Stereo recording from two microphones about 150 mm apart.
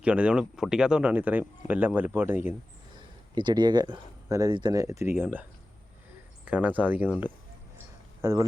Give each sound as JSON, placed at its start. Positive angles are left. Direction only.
{"t": 0.0, "sound": "speech", "side_deg": -10}
{"t": 3.3, "sound": "speech", "side_deg": -30}